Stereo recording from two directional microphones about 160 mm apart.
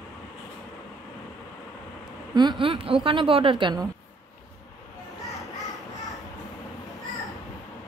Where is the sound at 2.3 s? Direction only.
25° right (ahead or behind).